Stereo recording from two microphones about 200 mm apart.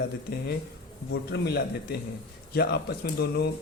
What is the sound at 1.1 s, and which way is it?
Speech, 55° left (ahead or behind).